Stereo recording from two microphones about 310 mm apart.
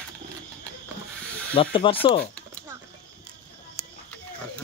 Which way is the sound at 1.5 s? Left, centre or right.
Centre.